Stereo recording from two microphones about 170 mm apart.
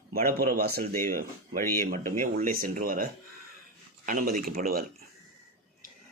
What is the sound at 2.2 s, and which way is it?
Speech, 55° right (ahead or behind).